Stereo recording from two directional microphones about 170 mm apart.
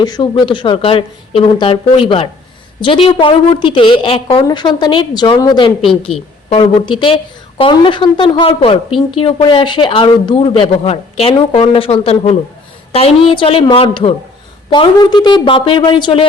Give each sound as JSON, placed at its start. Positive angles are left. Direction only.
{"t": 0.0, "sound": "speech", "side_deg": 25}
{"t": 6.1, "sound": "a woman's voice", "side_deg": 0}
{"t": 6.5, "sound": "speech", "side_deg": 30}